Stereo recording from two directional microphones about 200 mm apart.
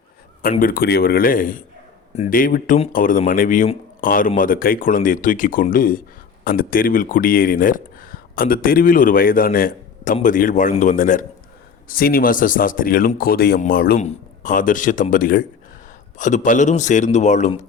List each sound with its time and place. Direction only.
0.6 s a man's voice: 50° left (ahead or behind)